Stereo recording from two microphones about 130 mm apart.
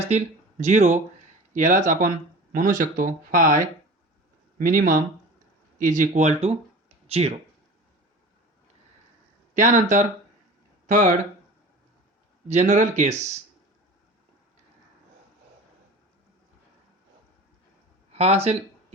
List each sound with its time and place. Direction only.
0.0 s speech: 60° right (ahead or behind)
1.5 s speech: 80° right
5.8 s speech: 75° right (ahead or behind); by 7.3 s 50° right (ahead or behind)
9.6 s speech: 75° right (ahead or behind)
10.8 s speech: 80° right
12.5 s speech: 60° right (ahead or behind)
18.1 s speech: 55° right (ahead or behind)